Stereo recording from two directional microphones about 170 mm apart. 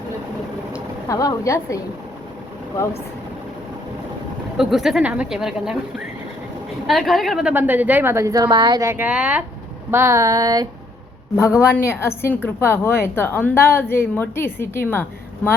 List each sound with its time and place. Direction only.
1.0 s a woman's voice: 20° left (ahead or behind)
4.5 s speech: centre (ahead or behind)
6.8 s a woman's voice: centre (ahead or behind)
9.9 s a sound: 15° right (ahead or behind)
11.3 s a woman's voice: 15° left (ahead or behind)